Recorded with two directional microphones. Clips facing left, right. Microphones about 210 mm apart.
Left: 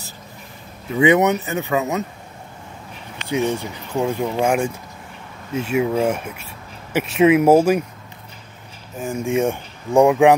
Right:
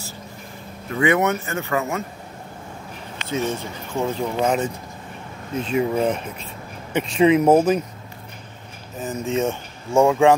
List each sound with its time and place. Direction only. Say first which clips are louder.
0.9 s speech: left 4 dB; 20° left (ahead or behind)
3.3 s speech: left 4 dB; 15° left (ahead or behind)
9.0 s speech: left 3 dB; 10° left (ahead or behind)